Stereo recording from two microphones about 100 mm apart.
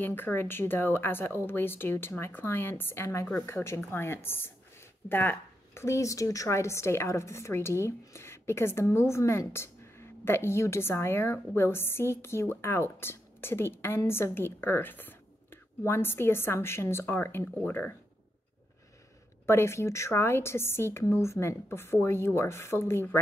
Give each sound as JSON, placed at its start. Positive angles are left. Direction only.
{"t": 0.0, "sound": "speech", "side_deg": 20}
{"t": 19.4, "sound": "speech", "side_deg": 25}